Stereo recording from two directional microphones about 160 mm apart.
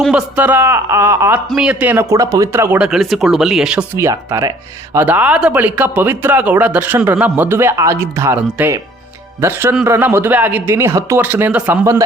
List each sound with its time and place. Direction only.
0.1 s speech: 10° right (ahead or behind)
1.5 s speech: 5° right (ahead or behind)
3.9 s speech: 15° right (ahead or behind)